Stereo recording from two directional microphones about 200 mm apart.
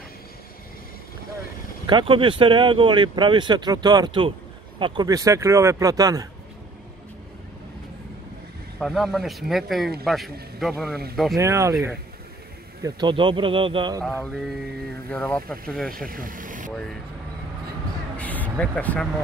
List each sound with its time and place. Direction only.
1.9 s speech: 25° right (ahead or behind)
8.7 s speech: centre (ahead or behind)
11.3 s speech: 15° right (ahead or behind)
12.8 s speech: 25° right (ahead or behind)
15.0 s speech: 5° left (ahead or behind)
16.1 s speech: 45° right (ahead or behind)
18.1 s a sound: 5° left (ahead or behind)
18.6 s speech: 5° left (ahead or behind)